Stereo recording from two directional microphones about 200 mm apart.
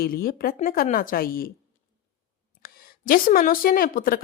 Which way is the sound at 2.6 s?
45° left (ahead or behind).